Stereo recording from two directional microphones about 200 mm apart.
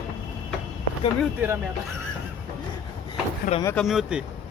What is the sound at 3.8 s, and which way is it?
Speech, centre (ahead or behind).